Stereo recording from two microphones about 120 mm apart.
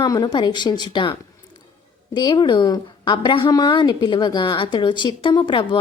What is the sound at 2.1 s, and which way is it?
A woman's voice, 40° left (ahead or behind).